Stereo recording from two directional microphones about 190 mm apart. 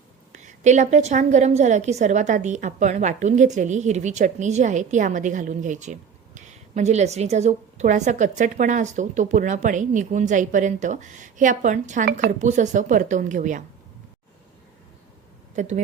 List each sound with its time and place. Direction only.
0.3 s a woman's voice: 40° right (ahead or behind)
15.5 s a woman's voice: 40° right (ahead or behind)